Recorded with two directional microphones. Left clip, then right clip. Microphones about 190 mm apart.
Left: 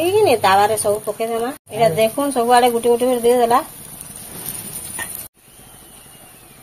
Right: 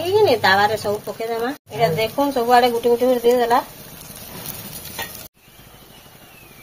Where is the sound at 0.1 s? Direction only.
15° left (ahead or behind).